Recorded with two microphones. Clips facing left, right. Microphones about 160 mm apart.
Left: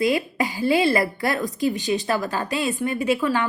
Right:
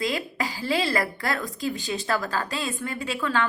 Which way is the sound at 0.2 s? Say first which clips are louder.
Left 6 dB; 20° left (ahead or behind).